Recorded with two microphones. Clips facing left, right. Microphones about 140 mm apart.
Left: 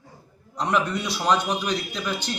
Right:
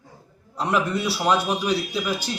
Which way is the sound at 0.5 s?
5° right (ahead or behind).